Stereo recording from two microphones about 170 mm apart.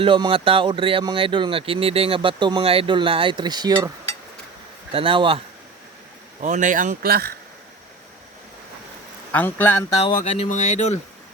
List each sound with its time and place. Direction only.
0.0 s speech: 30° right (ahead or behind)
4.9 s speech: 30° right (ahead or behind)
6.4 s speech: 45° right (ahead or behind); by 7.3 s 65° right (ahead or behind)
9.3 s a man's voice: 10° left (ahead or behind)
10.2 s speech: 35° left (ahead or behind)